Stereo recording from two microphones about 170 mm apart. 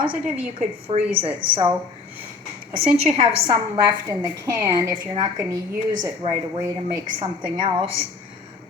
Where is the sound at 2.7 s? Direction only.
35° right (ahead or behind).